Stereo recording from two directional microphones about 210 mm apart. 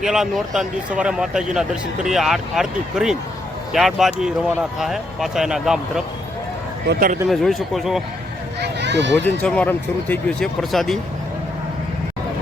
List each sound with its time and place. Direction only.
0.0 s speech: centre (ahead or behind)
6.8 s speech: 50° right (ahead or behind)
7.3 s speech: centre (ahead or behind)
8.6 s a sound: 55° right (ahead or behind)
9.2 s speech: 5° left (ahead or behind)